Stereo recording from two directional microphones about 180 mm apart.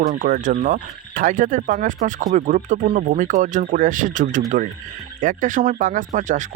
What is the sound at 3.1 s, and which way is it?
Speech, 45° right (ahead or behind).